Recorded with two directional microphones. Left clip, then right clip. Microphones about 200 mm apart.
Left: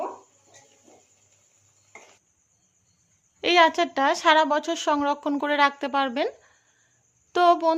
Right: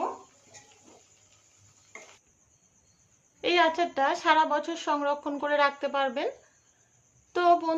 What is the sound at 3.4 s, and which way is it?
A woman's voice, 55° left (ahead or behind).